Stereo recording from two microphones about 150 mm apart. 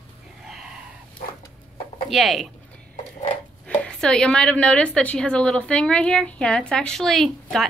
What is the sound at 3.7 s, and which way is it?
A woman's voice, 5° left (ahead or behind).